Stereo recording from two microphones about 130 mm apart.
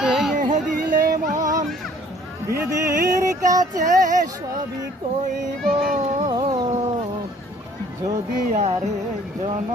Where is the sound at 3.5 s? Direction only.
25° right (ahead or behind).